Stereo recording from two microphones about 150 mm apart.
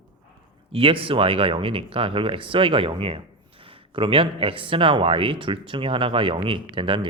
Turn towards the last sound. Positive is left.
turn(degrees=-35)  # may be behind; listen again after turning